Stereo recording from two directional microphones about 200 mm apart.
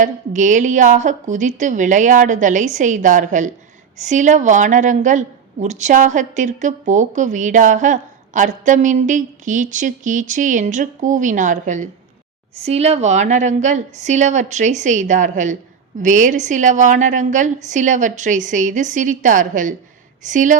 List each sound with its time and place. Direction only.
0.0 s a woman's voice: 40° right (ahead or behind)